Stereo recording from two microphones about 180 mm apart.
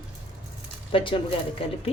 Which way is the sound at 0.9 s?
30° left (ahead or behind).